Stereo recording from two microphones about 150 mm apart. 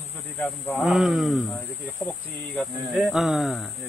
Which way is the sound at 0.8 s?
Centre (ahead or behind).